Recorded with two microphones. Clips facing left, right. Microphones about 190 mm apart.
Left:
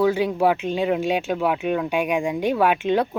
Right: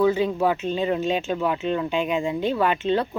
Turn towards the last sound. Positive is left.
turn(degrees=10)  # may be behind; listen again after turning